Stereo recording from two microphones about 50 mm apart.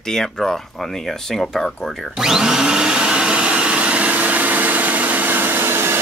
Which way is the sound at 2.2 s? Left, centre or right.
Centre.